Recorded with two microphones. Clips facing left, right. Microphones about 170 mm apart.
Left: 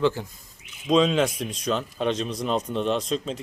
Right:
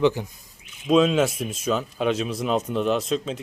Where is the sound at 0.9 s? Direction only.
5° right (ahead or behind).